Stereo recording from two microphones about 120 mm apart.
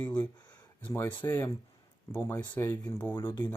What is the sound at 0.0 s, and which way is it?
Speech, 15° left (ahead or behind).